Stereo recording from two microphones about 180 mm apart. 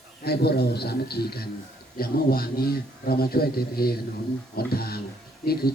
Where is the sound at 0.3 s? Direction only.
60° left (ahead or behind).